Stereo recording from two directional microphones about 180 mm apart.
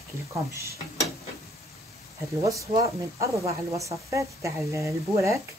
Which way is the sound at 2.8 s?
15° right (ahead or behind).